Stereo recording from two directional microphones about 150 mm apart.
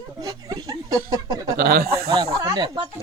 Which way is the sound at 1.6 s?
90° right.